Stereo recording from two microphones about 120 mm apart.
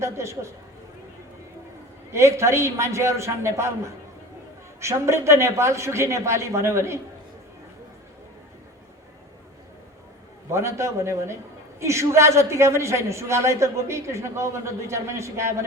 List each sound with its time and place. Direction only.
0.0 s a woman's voice: 25° right (ahead or behind)
2.1 s a woman's voice: 25° right (ahead or behind)
10.5 s a woman's voice: 25° right (ahead or behind)